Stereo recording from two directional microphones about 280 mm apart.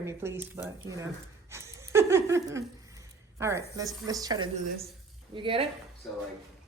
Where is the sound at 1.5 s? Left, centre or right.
Centre.